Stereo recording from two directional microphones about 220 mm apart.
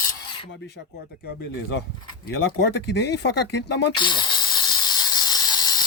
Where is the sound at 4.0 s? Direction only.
20° left (ahead or behind).